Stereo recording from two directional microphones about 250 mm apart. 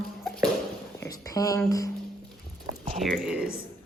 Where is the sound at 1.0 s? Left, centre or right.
Centre.